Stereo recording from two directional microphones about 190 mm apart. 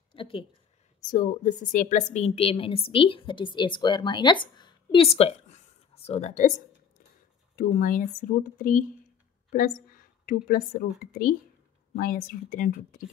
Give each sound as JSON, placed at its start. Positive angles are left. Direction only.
{"t": 0.1, "sound": "a sound", "side_deg": 25}
{"t": 1.1, "sound": "a woman's voice", "side_deg": 40}
{"t": 7.5, "sound": "a woman's voice", "side_deg": 45}